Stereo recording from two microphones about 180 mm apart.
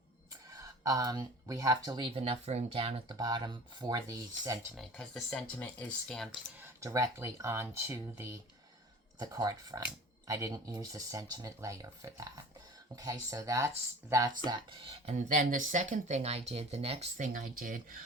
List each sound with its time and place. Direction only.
0.5 s speech: 20° right (ahead or behind)
4.8 s speech: centre (ahead or behind)
6.6 s speech: 15° right (ahead or behind)
15.0 s speech: 45° right (ahead or behind)